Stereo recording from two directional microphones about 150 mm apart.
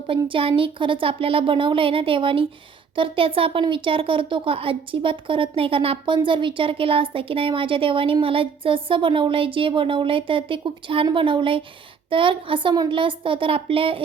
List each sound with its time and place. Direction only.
0.3 s speech: 35° right (ahead or behind)